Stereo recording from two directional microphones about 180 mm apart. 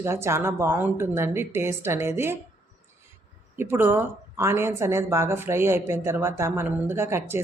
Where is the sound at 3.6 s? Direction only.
10° right (ahead or behind).